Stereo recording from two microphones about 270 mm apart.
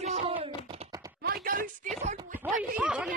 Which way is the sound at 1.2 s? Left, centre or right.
Right.